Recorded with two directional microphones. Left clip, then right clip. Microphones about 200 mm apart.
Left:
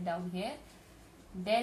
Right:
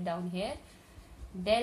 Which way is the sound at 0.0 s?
50° right (ahead or behind).